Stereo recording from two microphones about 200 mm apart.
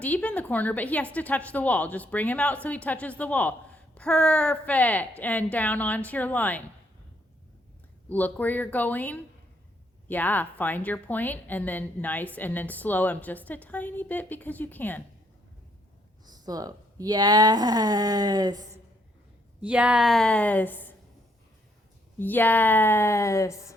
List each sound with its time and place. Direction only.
0.0 s a woman's voice: 5° left (ahead or behind)
8.1 s a woman's voice: 10° left (ahead or behind)
16.4 s speech: 20° right (ahead or behind)
19.6 s a woman's voice: 5° right (ahead or behind)
22.2 s a woman's voice: 10° left (ahead or behind)